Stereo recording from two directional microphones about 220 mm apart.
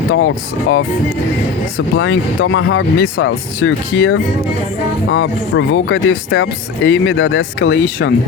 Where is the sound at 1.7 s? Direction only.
55° left (ahead or behind).